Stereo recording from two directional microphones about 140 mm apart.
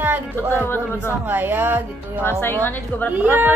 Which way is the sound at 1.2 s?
15° right (ahead or behind).